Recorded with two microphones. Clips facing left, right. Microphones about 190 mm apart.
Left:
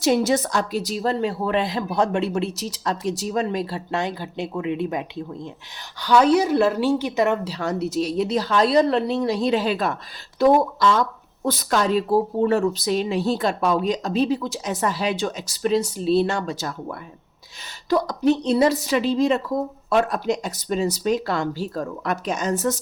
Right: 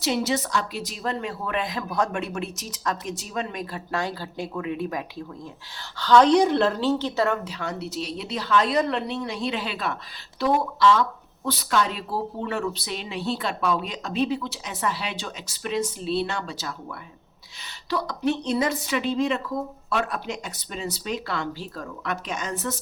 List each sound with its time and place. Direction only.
0.0 s a woman's voice: 45° left (ahead or behind); by 5.2 s 20° left (ahead or behind)
6.0 s a woman's voice: 10° left (ahead or behind)
7.4 s a woman's voice: 40° left (ahead or behind)
17.8 s a woman's voice: 45° left (ahead or behind)